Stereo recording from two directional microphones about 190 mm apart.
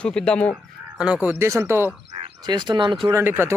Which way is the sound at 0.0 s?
5° left (ahead or behind).